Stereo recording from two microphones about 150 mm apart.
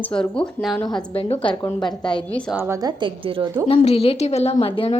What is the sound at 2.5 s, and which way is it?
Speech, 15° right (ahead or behind).